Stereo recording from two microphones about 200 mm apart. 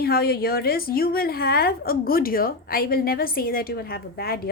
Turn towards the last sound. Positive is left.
turn(degrees=50)  # may be behind; listen again after turning